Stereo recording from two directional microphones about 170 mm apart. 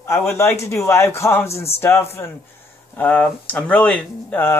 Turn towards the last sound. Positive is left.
turn(degrees=10)  # may be behind; listen again after turning